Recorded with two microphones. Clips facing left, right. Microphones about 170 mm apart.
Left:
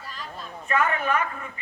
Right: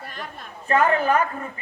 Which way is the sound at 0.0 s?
60° right (ahead or behind).